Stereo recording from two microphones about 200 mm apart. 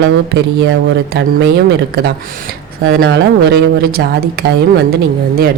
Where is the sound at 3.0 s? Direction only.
55° right (ahead or behind).